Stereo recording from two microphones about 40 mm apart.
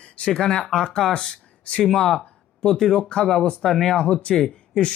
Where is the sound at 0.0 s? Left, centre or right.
Left.